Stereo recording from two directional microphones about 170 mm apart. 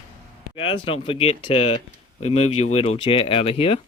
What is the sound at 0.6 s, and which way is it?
Speech, 30° left (ahead or behind).